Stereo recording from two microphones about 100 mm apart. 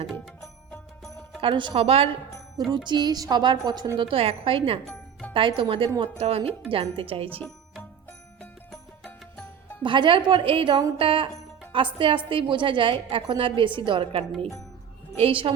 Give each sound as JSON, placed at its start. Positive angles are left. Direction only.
{"t": 1.4, "sound": "a woman's voice", "side_deg": -55}
{"t": 2.6, "sound": "a woman's voice", "side_deg": -50}
{"t": 4.1, "sound": "a woman's voice", "side_deg": -70}
{"t": 6.0, "sound": "speech", "side_deg": -85}
{"t": 6.7, "sound": "a woman's voice", "side_deg": -65}
{"t": 9.8, "sound": "a woman's voice", "side_deg": -55}